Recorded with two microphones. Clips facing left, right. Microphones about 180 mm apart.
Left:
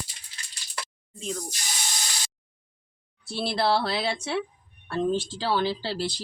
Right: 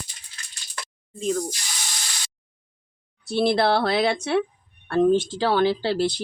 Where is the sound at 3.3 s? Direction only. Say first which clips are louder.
Right 5 dB; 60° right (ahead or behind).